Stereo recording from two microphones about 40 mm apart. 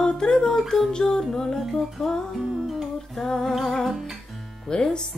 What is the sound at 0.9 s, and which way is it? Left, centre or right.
Music, centre.